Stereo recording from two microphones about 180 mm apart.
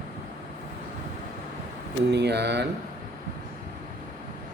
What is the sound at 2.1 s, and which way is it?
Speech, 70° right (ahead or behind).